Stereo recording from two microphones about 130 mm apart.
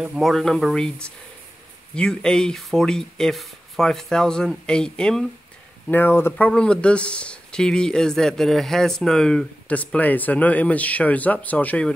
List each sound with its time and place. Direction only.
0.0 s speech: 5° right (ahead or behind)